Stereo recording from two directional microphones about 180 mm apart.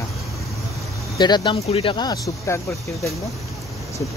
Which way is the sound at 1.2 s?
25° left (ahead or behind).